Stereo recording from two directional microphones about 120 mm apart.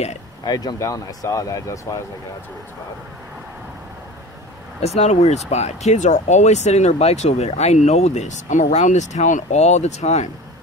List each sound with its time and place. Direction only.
0.5 s speech: 30° left (ahead or behind)
4.8 s speech: 70° left (ahead or behind)